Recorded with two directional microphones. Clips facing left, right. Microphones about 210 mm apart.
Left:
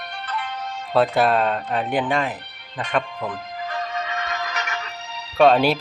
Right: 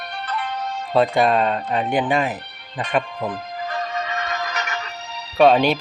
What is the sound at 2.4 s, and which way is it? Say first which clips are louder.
Music: right 2 dB; 40° right (ahead or behind).